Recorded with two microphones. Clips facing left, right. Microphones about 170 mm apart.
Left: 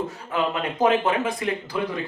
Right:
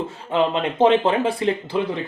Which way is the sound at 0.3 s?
25° right (ahead or behind).